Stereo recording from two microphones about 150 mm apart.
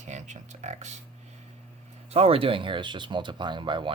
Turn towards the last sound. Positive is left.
turn(degrees=-30)  # may be behind; listen again after turning